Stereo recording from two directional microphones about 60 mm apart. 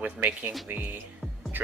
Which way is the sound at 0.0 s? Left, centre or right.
Right.